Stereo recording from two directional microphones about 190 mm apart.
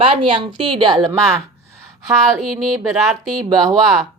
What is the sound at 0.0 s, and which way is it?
A woman's voice, 30° right (ahead or behind).